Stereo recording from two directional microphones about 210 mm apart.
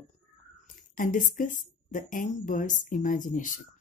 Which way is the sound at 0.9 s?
40° left (ahead or behind).